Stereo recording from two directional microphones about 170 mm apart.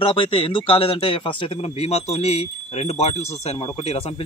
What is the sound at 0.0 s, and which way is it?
Speech, 30° left (ahead or behind).